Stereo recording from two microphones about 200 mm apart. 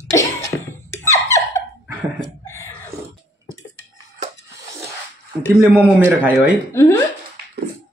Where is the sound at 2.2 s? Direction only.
15° left (ahead or behind).